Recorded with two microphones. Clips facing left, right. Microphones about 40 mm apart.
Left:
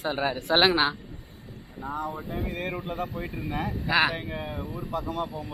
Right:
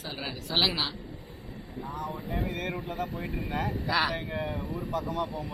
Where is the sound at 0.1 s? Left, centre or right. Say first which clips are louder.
Left 10 dB; left.